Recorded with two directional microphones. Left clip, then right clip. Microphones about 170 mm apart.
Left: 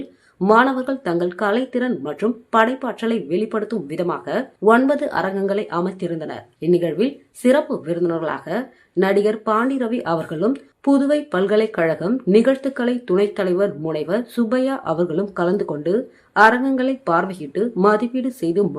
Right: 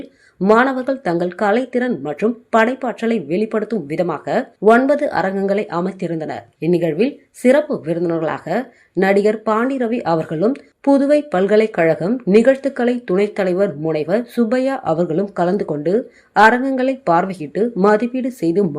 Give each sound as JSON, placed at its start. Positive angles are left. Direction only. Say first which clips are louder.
{"t": 0.3, "sound": "speech", "louder": "right 1 dB", "side_deg": -10}